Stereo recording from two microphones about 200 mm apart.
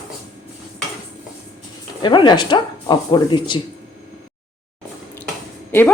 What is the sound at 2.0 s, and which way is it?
Speech, 25° left (ahead or behind).